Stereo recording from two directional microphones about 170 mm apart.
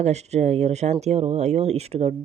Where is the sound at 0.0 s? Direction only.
40° right (ahead or behind).